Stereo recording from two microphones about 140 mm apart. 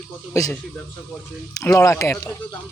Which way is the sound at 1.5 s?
25° left (ahead or behind).